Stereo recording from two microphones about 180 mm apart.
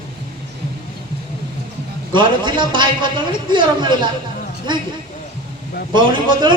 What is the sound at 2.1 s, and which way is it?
A man's voice, 25° right (ahead or behind).